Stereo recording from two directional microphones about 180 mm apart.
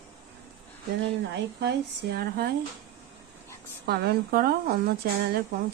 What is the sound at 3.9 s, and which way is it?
Speech, 65° right (ahead or behind).